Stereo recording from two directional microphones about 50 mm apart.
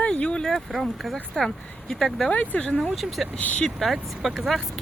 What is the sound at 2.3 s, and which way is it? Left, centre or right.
Speech, left.